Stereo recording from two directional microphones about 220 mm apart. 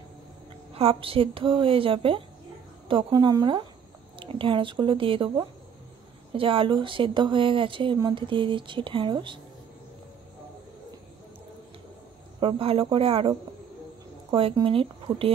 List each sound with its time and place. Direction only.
0.7 s speech: 25° right (ahead or behind)
12.4 s speech: 25° right (ahead or behind)
14.3 s speech: 25° right (ahead or behind)